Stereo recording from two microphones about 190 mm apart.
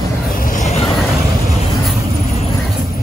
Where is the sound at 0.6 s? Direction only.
40° left (ahead or behind).